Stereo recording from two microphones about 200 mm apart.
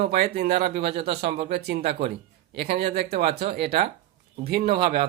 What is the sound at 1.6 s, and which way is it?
Speech, 55° right (ahead or behind).